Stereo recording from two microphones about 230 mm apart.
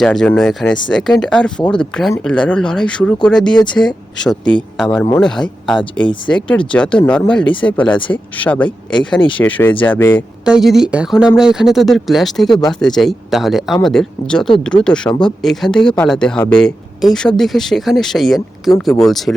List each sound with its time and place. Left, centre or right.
0.0 s speech: centre
3.5 s speech: centre
3.8 s speech: centre
6.0 s speech: left
6.7 s speech: centre
7.9 s speech: left
8.4 s speech: centre
10.4 s speech: centre